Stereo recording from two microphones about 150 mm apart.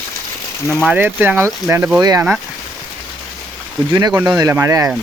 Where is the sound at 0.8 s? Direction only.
10° right (ahead or behind).